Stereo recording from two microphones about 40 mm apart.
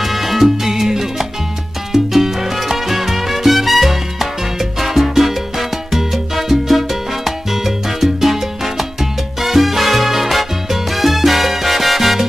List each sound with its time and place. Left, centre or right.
0.0 s salsa music: centre